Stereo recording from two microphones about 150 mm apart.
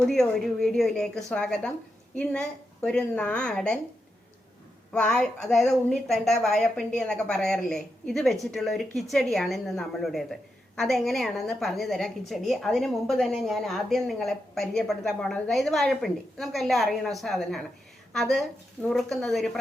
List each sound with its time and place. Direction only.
0.0 s a woman's voice: 5° left (ahead or behind)
4.9 s a woman's voice: 5° left (ahead or behind)